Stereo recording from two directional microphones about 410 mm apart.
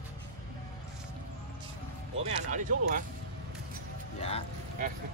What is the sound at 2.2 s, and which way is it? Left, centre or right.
Speech, centre.